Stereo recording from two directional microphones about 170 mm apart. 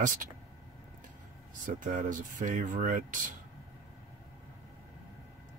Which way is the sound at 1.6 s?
50° right (ahead or behind).